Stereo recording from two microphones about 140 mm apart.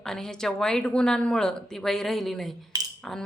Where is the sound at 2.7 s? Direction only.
25° right (ahead or behind).